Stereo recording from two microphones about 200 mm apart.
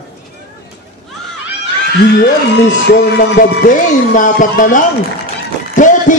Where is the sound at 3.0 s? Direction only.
50° left (ahead or behind).